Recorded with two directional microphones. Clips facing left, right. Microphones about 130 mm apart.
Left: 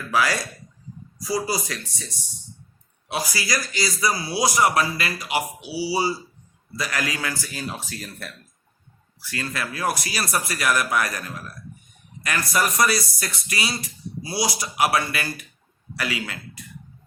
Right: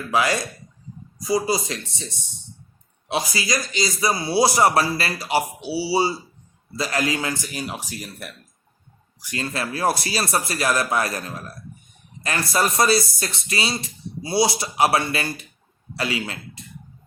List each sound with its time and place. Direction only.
0.1 s speech: 25° right (ahead or behind)